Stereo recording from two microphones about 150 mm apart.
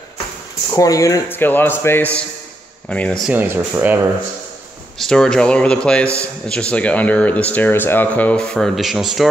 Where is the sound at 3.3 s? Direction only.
15° right (ahead or behind).